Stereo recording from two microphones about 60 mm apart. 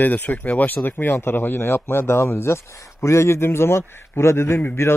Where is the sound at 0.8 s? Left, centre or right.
Left.